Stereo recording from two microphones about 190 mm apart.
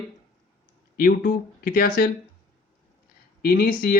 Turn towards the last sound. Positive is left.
turn(degrees=50)  # may be behind; listen again after turning